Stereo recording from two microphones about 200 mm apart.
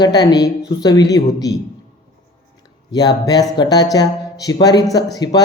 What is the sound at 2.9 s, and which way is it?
A woman's voice, 20° left (ahead or behind).